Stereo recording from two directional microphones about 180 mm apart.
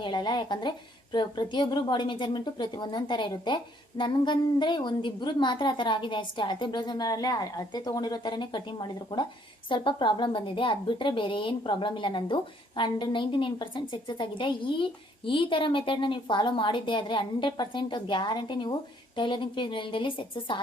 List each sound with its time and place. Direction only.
0.0 s a woman's voice: 25° left (ahead or behind)